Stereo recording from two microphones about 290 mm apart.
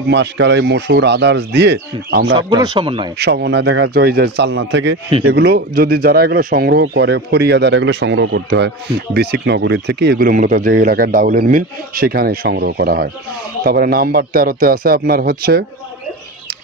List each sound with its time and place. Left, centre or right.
0.1 s speech: right
2.3 s speech: centre
3.2 s speech: right